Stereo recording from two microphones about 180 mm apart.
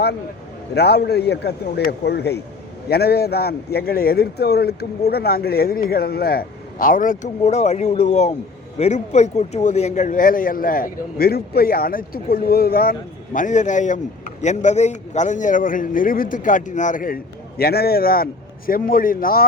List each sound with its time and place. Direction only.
0.7 s a man's voice: 65° left (ahead or behind); by 17.2 s 50° left (ahead or behind)
17.6 s a man's voice: 60° left (ahead or behind)